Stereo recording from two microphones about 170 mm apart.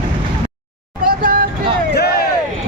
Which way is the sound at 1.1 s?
55° right (ahead or behind).